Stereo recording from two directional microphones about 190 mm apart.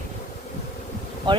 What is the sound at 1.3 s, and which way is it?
Speech, 25° right (ahead or behind).